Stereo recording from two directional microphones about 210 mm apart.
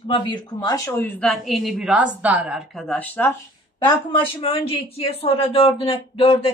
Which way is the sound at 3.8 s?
25° left (ahead or behind).